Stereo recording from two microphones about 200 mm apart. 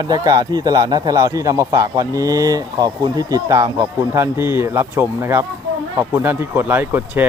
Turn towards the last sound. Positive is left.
turn(degrees=-10)  # may be behind; listen again after turning